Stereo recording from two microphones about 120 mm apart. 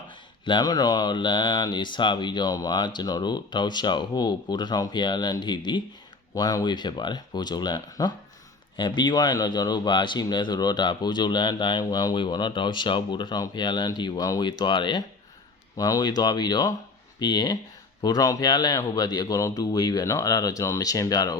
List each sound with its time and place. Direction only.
0.4 s speech: 40° left (ahead or behind)